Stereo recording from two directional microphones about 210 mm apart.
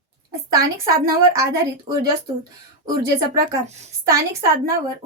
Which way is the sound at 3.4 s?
30° right (ahead or behind).